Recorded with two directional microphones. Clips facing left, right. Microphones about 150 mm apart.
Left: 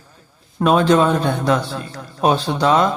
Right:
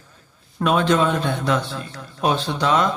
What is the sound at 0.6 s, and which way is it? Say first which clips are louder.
Speech: left 4 dB; 35° left (ahead or behind).